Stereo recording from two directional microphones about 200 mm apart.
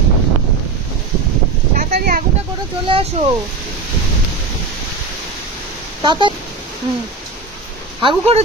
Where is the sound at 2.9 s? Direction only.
25° right (ahead or behind).